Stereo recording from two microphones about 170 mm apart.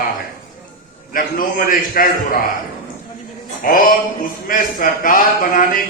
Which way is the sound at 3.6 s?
55° left (ahead or behind).